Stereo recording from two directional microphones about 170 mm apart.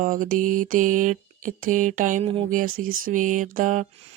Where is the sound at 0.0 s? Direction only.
50° right (ahead or behind).